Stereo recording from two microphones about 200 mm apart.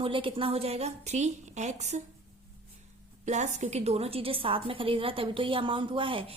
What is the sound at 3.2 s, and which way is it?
A woman's voice, 35° right (ahead or behind).